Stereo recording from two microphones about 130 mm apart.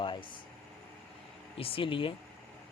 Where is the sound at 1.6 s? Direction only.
45° left (ahead or behind).